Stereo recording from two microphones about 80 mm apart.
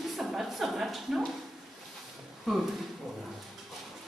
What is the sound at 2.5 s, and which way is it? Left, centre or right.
Speech, centre.